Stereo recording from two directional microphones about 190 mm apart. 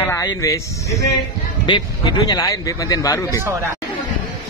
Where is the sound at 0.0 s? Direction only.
15° left (ahead or behind).